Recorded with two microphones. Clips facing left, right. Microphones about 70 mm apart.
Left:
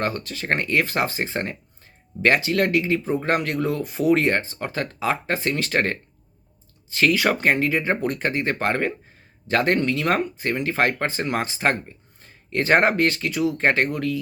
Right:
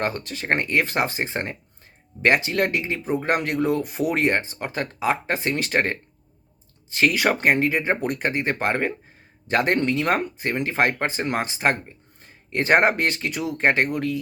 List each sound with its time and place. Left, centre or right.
0.0 s speech: right